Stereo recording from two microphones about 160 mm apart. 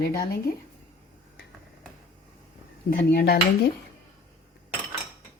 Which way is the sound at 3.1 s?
75° left (ahead or behind).